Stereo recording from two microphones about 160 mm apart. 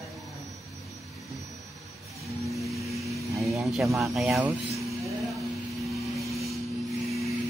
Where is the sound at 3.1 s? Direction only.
20° right (ahead or behind).